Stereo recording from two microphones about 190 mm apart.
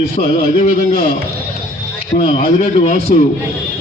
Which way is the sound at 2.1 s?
45° left (ahead or behind).